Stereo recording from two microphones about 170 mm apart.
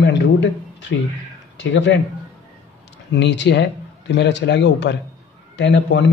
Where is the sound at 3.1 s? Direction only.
90° left.